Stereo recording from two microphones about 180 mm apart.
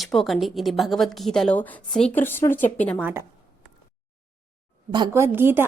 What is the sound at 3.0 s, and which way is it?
Speech, 15° right (ahead or behind).